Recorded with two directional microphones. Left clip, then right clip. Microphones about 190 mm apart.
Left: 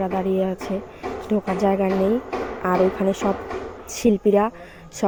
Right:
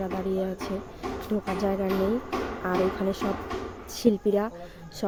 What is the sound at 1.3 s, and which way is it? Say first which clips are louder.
Speech: left 8 dB; 20° left (ahead or behind).